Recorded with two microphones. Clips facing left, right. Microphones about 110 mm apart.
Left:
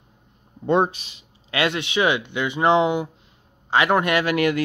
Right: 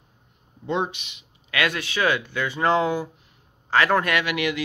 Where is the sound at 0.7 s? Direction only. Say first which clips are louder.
Left 6 dB; 50° left (ahead or behind); by 4.2 s 20° left (ahead or behind).